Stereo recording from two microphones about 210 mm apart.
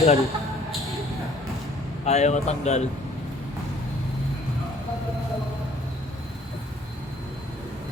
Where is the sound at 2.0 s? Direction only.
30° left (ahead or behind).